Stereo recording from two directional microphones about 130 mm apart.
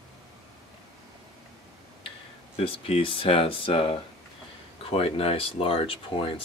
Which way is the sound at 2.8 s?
45° left (ahead or behind).